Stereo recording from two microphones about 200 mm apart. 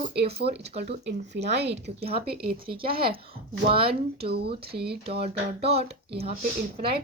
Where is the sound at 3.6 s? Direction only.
25° right (ahead or behind).